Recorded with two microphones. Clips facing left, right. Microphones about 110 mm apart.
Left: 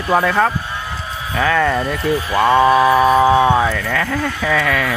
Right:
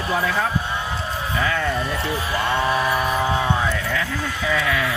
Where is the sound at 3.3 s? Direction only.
90° left; by 4.9 s 70° left (ahead or behind).